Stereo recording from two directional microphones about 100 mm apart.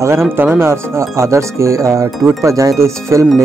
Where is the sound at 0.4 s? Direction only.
20° right (ahead or behind).